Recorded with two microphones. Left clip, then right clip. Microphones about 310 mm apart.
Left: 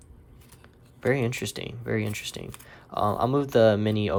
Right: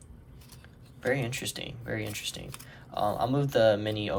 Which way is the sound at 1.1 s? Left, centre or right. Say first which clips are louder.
Left 3 dB; left.